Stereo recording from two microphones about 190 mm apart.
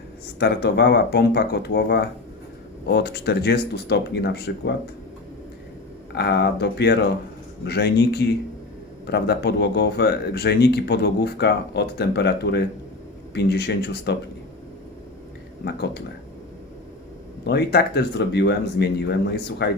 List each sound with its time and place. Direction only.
0.3 s speech: 55° left (ahead or behind)
6.1 s speech: 60° left (ahead or behind)
15.6 s speech: 60° left (ahead or behind)
17.4 s speech: 60° left (ahead or behind)